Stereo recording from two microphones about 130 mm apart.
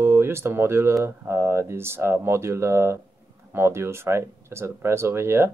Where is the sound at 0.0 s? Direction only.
20° right (ahead or behind).